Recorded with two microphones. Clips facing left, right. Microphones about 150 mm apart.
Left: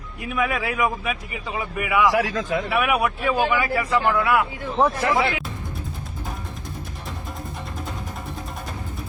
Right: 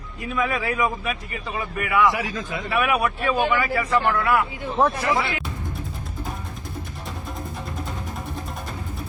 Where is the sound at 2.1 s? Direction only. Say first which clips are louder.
Left 6 dB; 85° left.